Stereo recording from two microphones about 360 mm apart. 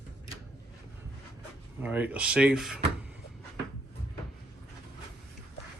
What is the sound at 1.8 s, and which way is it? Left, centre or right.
Speech, centre.